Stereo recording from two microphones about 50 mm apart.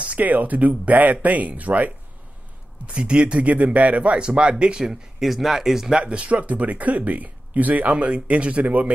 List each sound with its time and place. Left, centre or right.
0.0 s speech: right
2.9 s speech: centre
5.2 s speech: centre
5.9 s speech: right